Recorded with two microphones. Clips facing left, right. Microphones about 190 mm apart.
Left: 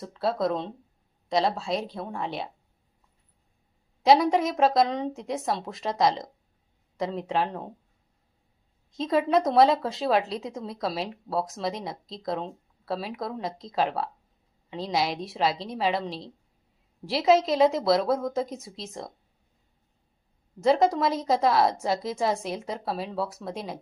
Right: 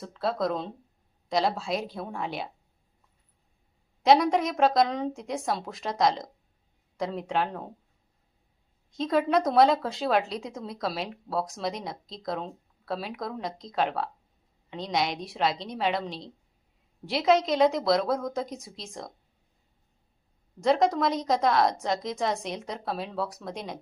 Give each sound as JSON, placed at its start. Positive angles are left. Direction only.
{"t": 0.0, "sound": "a woman's voice", "side_deg": 0}
{"t": 4.0, "sound": "a woman's voice", "side_deg": 0}
{"t": 9.0, "sound": "a woman's voice", "side_deg": 0}
{"t": 20.6, "sound": "a woman's voice", "side_deg": 5}